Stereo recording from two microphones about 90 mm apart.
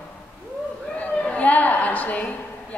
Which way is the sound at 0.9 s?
10° left (ahead or behind).